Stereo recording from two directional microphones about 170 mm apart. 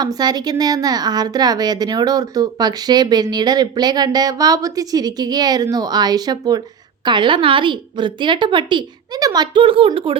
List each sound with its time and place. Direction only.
0.0 s a woman's voice: 25° right (ahead or behind)